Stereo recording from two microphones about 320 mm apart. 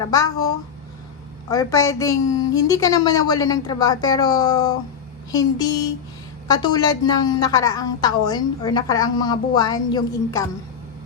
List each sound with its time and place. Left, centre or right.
0.0 s a woman's voice: centre
1.5 s a woman's voice: centre